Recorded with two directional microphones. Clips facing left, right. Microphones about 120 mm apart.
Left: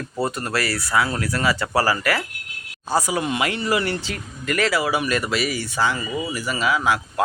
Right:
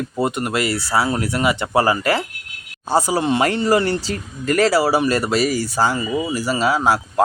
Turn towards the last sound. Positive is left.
turn(degrees=-35)  # may be behind; listen again after turning